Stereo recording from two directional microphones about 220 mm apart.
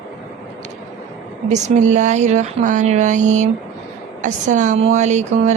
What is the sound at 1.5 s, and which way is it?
Speech, 30° right (ahead or behind).